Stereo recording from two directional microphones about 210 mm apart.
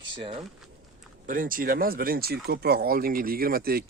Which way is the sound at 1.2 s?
40° right (ahead or behind).